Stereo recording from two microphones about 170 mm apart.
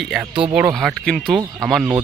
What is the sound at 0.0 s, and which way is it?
Speech, 5° right (ahead or behind).